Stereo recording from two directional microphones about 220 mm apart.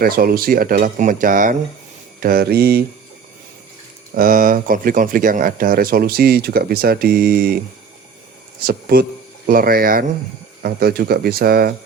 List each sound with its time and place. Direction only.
0.0 s speech: 40° right (ahead or behind)
4.1 s speech: 40° right (ahead or behind)
8.6 s speech: 45° right (ahead or behind)